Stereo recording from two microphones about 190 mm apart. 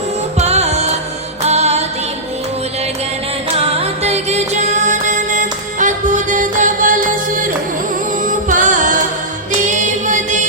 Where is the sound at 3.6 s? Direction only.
30° right (ahead or behind).